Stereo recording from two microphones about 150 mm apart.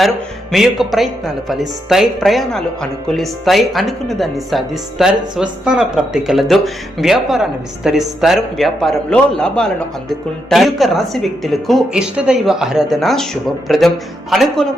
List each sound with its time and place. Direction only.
0.5 s a man's voice: centre (ahead or behind)